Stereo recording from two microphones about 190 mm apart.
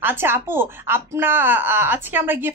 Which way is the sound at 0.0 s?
10° right (ahead or behind).